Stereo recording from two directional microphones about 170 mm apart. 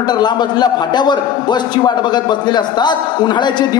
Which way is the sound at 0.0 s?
25° left (ahead or behind).